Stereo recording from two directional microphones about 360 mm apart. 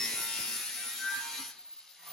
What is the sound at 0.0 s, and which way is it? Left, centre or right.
Music, centre.